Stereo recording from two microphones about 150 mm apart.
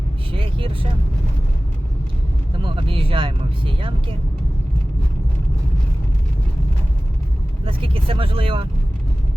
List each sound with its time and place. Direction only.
0.3 s vehicle: 35° right (ahead or behind)
2.5 s speech: 35° right (ahead or behind)
7.6 s speech: 35° right (ahead or behind)